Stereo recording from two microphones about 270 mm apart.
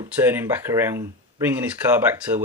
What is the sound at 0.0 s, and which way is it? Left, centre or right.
Speech, centre.